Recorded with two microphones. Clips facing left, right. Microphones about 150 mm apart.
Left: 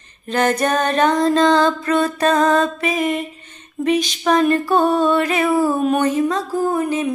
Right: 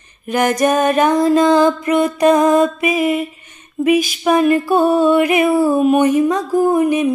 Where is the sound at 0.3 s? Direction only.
10° right (ahead or behind).